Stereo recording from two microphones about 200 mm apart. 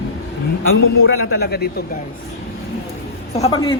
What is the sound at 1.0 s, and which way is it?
Speech, 50° left (ahead or behind).